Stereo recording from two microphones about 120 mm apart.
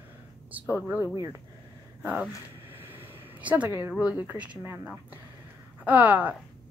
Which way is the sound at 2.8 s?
15° right (ahead or behind).